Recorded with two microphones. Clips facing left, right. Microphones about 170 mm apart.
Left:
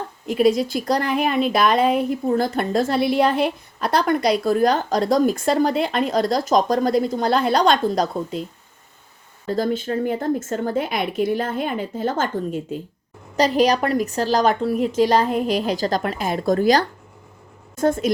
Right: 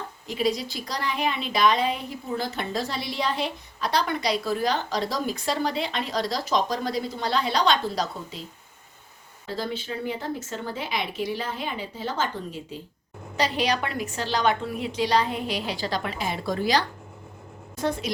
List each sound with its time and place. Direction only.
0.3 s a woman's voice: 55° left (ahead or behind)
9.5 s a woman's voice: 50° left (ahead or behind)